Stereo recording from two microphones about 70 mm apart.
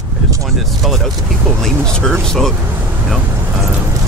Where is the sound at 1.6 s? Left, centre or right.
Centre.